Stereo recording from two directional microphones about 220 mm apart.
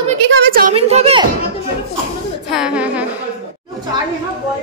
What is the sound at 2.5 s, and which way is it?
Speech, 5° right (ahead or behind).